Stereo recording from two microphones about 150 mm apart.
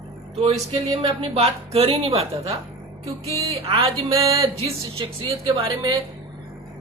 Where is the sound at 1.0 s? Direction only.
45° right (ahead or behind).